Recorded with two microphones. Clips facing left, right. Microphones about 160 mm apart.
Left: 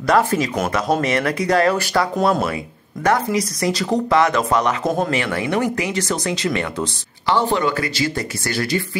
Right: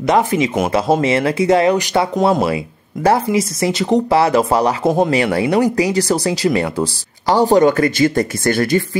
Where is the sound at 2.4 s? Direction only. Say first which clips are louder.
Right 5 dB; 30° right (ahead or behind).